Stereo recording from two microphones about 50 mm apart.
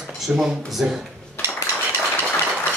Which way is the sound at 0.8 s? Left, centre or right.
Centre.